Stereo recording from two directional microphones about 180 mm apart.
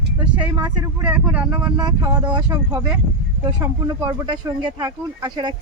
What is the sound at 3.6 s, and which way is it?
Speech, 25° right (ahead or behind).